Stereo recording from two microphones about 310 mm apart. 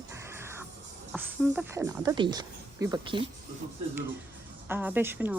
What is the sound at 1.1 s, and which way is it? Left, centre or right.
Speech, centre.